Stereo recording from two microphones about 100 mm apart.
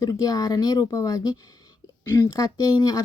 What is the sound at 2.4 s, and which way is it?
Speech, 35° left (ahead or behind).